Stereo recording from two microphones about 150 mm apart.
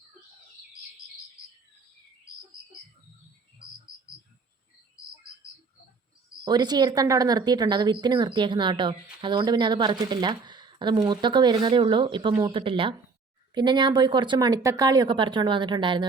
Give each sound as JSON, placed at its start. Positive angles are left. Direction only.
{"t": 6.4, "sound": "speech", "side_deg": -30}